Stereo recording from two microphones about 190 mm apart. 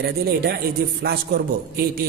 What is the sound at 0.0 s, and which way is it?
A man's voice, 55° right (ahead or behind).